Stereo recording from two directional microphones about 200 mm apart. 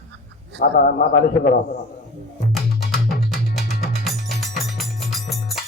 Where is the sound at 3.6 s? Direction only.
50° left (ahead or behind).